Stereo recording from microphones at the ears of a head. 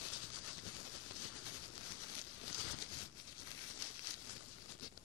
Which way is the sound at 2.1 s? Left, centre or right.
Left.